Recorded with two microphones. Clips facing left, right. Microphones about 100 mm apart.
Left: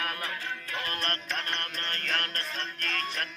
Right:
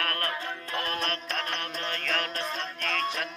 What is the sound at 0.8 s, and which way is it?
Music, centre (ahead or behind).